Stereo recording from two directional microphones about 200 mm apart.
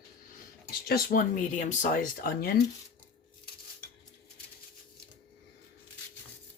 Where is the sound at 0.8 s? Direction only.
50° left (ahead or behind).